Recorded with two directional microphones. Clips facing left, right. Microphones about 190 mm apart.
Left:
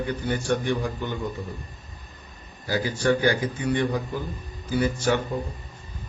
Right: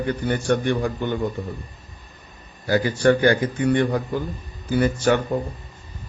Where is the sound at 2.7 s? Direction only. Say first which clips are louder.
Right 5 dB; 55° right (ahead or behind).